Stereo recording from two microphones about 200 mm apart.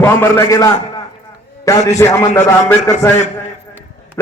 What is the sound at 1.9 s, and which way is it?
Speech, 15° left (ahead or behind).